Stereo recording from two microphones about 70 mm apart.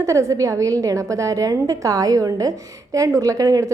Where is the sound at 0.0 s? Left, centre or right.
Right.